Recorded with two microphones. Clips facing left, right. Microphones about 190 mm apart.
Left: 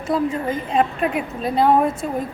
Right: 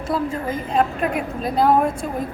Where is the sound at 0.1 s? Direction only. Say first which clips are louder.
Left 3 dB; centre (ahead or behind).